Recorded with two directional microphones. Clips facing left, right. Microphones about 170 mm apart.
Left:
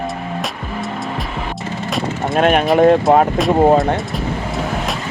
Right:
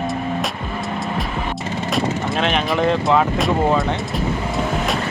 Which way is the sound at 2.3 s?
50° left (ahead or behind).